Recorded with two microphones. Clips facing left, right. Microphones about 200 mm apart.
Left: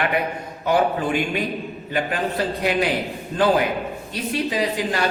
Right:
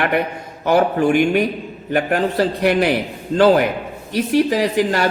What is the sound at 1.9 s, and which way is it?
Speech, 65° right (ahead or behind).